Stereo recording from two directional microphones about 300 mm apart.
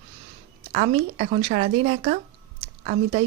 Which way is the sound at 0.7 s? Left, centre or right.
Right.